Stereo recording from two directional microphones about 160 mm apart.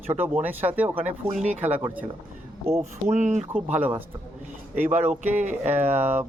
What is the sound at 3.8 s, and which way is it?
Speech, 10° right (ahead or behind).